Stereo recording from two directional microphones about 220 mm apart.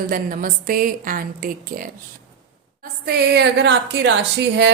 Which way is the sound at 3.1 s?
50° right (ahead or behind).